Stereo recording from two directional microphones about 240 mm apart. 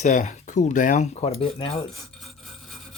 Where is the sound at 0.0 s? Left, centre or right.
Left.